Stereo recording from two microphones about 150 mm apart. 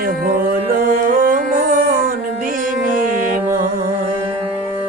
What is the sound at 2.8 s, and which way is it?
Music, 65° right (ahead or behind).